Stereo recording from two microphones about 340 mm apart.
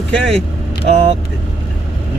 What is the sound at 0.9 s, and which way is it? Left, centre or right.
Speech, centre.